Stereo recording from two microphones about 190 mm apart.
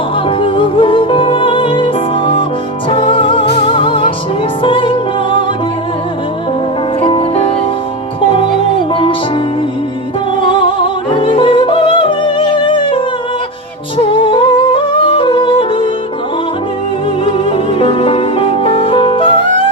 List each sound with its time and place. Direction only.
0.3 s music: 25° left (ahead or behind)
7.0 s music: 30° left (ahead or behind)
8.9 s music: 25° left (ahead or behind)
11.2 s music: 25° left (ahead or behind)
14.0 s yodeling: 25° left (ahead or behind)
17.2 s music: 30° left (ahead or behind)